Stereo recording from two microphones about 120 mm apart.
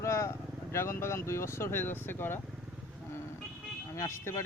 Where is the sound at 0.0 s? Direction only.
25° left (ahead or behind).